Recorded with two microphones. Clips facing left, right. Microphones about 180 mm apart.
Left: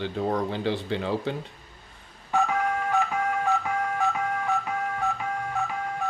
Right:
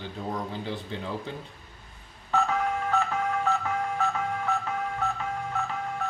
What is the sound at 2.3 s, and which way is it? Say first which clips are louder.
Telephone dialing: left 1 dB; 15° left (ahead or behind).